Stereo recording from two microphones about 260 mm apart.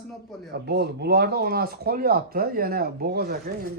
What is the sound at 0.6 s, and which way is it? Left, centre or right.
Speech, right.